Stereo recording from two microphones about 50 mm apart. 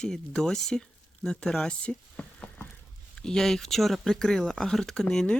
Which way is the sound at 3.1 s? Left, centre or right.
Centre.